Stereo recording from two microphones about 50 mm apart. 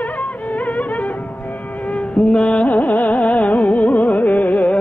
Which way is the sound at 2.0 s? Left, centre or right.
Left.